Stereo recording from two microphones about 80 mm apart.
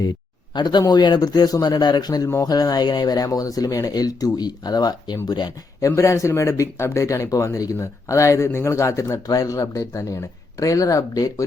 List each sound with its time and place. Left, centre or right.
0.5 s speech: left
5.8 s speech: left